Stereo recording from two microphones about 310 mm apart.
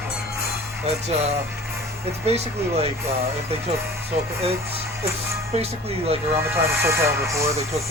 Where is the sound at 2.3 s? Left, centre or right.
Centre.